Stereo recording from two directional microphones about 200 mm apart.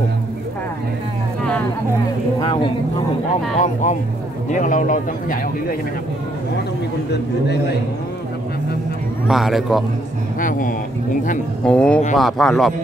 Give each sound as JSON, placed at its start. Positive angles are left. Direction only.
{"t": 2.4, "sound": "speech", "side_deg": 25}
{"t": 3.5, "sound": "speech", "side_deg": 35}
{"t": 9.3, "sound": "speech", "side_deg": 0}
{"t": 11.6, "sound": "speech", "side_deg": 5}